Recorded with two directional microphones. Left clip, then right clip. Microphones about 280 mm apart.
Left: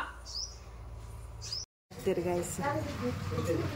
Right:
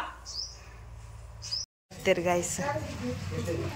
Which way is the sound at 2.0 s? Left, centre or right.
Centre.